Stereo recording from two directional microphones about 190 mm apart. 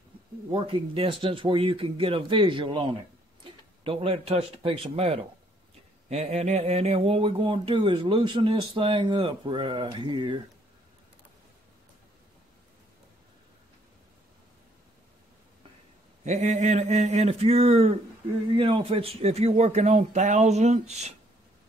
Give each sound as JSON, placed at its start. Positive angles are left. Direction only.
{"t": 0.5, "sound": "speech", "side_deg": -30}
{"t": 16.3, "sound": "a man's voice", "side_deg": -35}